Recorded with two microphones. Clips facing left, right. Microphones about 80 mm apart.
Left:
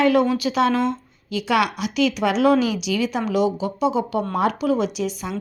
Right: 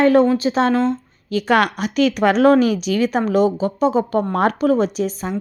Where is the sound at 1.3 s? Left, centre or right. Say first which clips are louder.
Right 4 dB; right.